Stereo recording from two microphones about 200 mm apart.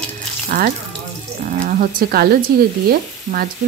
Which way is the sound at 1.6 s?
40° right (ahead or behind).